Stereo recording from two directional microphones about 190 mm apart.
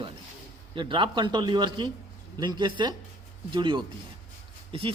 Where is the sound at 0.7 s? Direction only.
25° right (ahead or behind).